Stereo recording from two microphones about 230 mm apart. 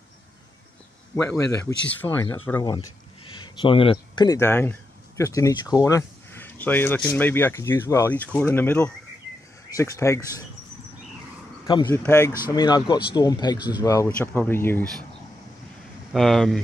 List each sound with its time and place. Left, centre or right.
1.1 s speech: centre
3.3 s speech: left
11.6 s a man's voice: left
11.9 s speech: centre
12.4 s speech: centre
16.1 s speech: centre